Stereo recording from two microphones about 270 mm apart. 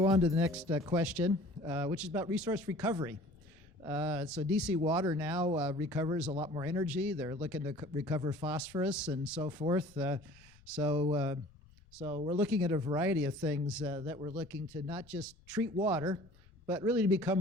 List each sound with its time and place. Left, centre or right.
0.0 s speech: centre
5.4 s speech: centre
6.3 s speech: centre
9.4 s speech: centre
10.9 s speech: centre